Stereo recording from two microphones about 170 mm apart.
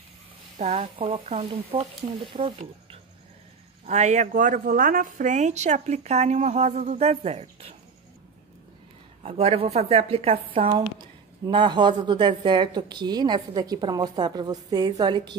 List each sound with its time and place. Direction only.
0.6 s speech: 35° right (ahead or behind)
3.8 s speech: 45° right (ahead or behind)
9.2 s a woman's voice: 35° right (ahead or behind)